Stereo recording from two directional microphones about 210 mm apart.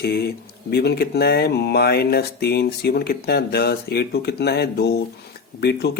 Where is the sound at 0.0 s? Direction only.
50° left (ahead or behind).